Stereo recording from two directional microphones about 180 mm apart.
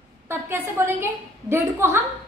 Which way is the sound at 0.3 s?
15° right (ahead or behind).